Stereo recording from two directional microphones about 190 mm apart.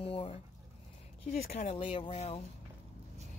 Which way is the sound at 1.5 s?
35° left (ahead or behind).